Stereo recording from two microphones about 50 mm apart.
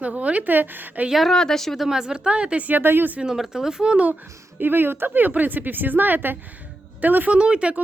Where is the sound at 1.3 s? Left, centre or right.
Centre.